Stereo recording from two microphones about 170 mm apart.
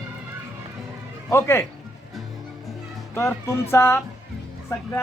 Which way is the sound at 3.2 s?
15° left (ahead or behind).